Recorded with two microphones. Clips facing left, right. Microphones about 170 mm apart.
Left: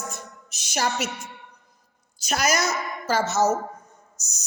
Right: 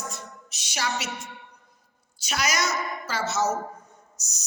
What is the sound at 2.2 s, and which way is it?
A woman's voice, 45° left (ahead or behind).